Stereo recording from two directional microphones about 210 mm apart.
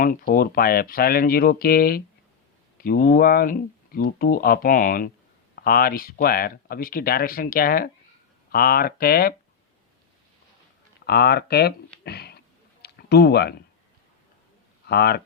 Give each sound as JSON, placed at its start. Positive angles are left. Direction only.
{"t": 0.0, "sound": "speech", "side_deg": 40}
{"t": 11.0, "sound": "speech", "side_deg": 50}
{"t": 12.8, "sound": "a sound", "side_deg": 50}
{"t": 14.8, "sound": "speech", "side_deg": 50}